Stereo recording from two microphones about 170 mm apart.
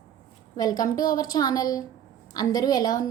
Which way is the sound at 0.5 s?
20° left (ahead or behind).